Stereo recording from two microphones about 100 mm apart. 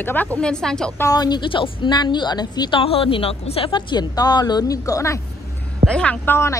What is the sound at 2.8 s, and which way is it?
A woman's voice, 70° left (ahead or behind).